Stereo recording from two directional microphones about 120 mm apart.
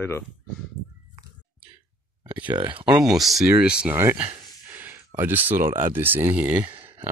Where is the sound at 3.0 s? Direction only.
Centre (ahead or behind).